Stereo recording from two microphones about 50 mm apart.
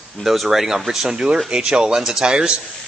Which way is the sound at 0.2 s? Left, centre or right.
Centre.